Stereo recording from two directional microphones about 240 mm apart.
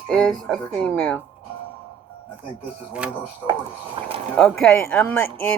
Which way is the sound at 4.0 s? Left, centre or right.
Right.